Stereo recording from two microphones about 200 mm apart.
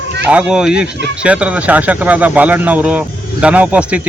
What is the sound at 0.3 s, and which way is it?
Speech, 5° right (ahead or behind).